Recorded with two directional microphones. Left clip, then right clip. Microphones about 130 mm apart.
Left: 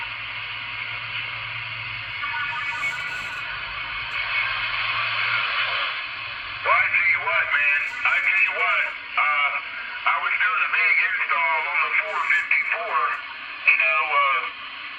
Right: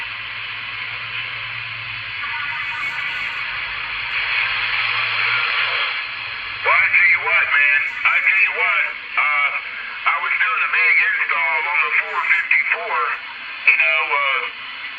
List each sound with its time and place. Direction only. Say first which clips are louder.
4.1 s a sound: right 5 dB; 45° right (ahead or behind)
6.7 s radio: right 5 dB; 45° right (ahead or behind); by 12.4 s 30° right (ahead or behind)
13.7 s radio: right 4 dB; 40° right (ahead or behind)